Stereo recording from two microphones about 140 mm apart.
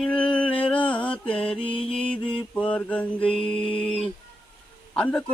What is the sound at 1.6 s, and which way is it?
Mantra, 40° left (ahead or behind).